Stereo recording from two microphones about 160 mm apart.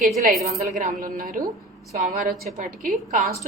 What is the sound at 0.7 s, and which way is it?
A woman's voice, 55° right (ahead or behind).